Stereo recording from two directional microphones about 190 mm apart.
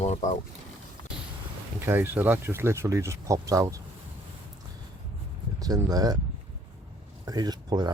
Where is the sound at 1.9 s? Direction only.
10° right (ahead or behind).